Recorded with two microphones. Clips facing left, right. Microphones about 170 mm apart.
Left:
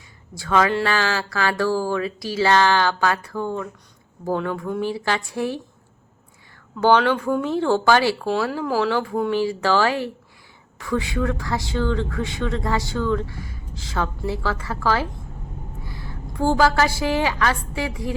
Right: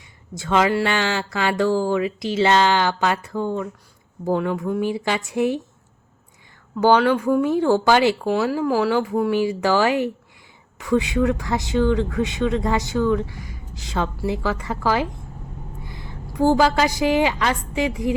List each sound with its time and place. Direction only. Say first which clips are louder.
0.3 s speech: right 1 dB; 20° right (ahead or behind)
6.7 s a woman's voice: right 1 dB; 10° right (ahead or behind)